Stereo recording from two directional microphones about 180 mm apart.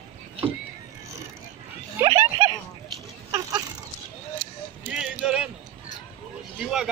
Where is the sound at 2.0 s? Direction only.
20° right (ahead or behind).